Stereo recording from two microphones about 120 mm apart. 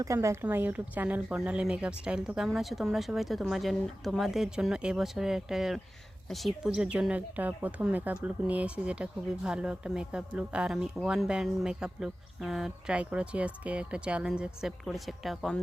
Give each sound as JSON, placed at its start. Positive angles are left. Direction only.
{"t": 0.0, "sound": "speech", "side_deg": -25}